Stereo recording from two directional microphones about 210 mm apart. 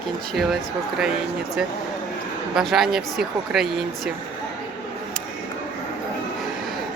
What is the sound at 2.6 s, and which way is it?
Speech, centre (ahead or behind).